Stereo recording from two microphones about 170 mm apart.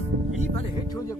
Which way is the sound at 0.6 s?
25° left (ahead or behind).